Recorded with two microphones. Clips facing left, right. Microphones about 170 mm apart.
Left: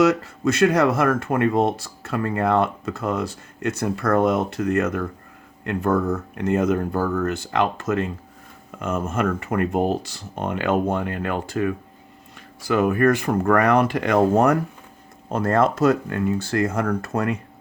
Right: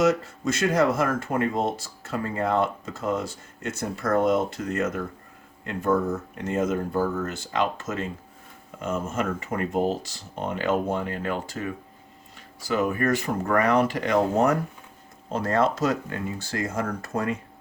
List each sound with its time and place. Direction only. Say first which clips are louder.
0.0 s speech: left 4 dB; 65° left (ahead or behind)